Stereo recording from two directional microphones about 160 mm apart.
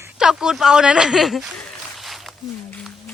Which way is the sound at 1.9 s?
Centre (ahead or behind).